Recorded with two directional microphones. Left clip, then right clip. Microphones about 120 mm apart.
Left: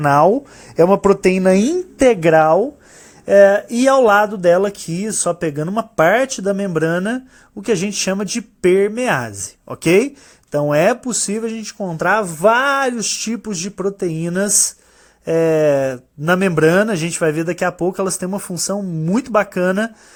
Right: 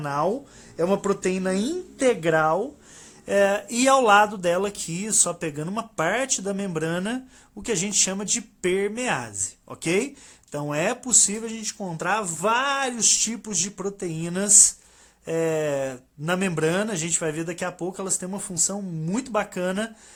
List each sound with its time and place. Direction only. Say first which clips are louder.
0.0 s speech: left 13 dB; 70° left (ahead or behind)
0.8 s a woman's voice: left 11 dB; 55° left (ahead or behind)
2.0 s speech: left 9 dB; 45° left (ahead or behind)
3.2 s speech: left 11 dB; 25° left (ahead or behind)
11.0 s speech: left 2 dB; 30° left (ahead or behind)